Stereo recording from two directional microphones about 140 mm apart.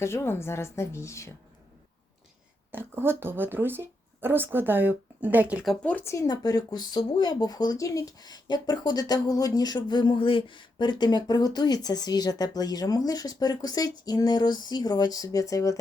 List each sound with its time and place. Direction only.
0.0 s speech: 20° left (ahead or behind)
2.7 s speech: 15° right (ahead or behind)
5.8 s speech: 10° left (ahead or behind)